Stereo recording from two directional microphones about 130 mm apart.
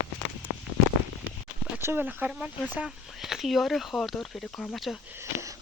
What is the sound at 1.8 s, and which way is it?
Speech, 15° right (ahead or behind).